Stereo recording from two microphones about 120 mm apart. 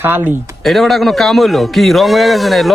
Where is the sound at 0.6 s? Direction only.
Centre (ahead or behind).